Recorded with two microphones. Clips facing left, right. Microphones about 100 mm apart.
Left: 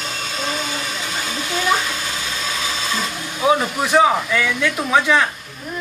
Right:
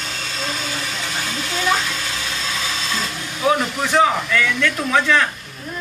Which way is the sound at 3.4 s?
15° left (ahead or behind).